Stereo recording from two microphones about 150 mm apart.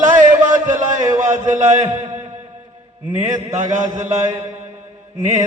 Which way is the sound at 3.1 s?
55° right (ahead or behind).